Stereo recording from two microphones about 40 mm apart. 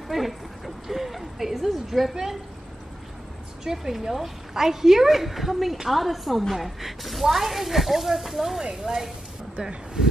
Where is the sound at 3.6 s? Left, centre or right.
Centre.